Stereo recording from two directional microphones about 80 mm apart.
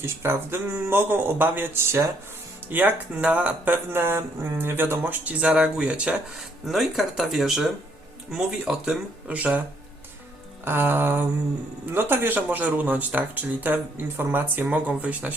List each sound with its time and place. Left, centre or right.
0.0 s speech: right
2.6 s speech: right
3.9 s speech: right
5.4 s speech: centre
10.7 s speech: right